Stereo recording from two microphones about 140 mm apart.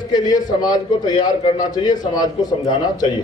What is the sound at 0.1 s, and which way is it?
Speech, 30° left (ahead or behind).